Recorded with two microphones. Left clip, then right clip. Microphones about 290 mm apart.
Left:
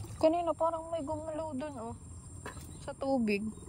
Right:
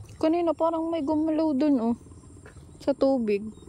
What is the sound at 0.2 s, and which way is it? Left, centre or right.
A woman's voice, centre.